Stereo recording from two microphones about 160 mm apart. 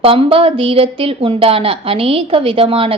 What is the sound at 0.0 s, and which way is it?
A woman's voice, 35° right (ahead or behind).